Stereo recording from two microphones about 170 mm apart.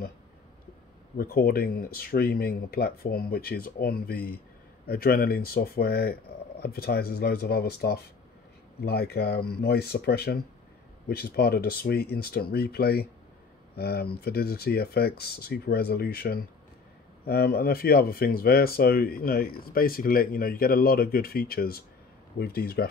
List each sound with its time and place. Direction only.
1.1 s speech: 60° left (ahead or behind)